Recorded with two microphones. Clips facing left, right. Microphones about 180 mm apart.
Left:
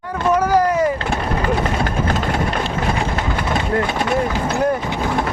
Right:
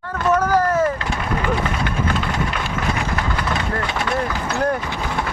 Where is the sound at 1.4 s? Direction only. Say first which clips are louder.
Left 3 dB; 40° left (ahead or behind).